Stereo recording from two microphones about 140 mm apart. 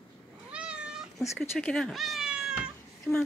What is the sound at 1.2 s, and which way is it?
Speech, 15° left (ahead or behind).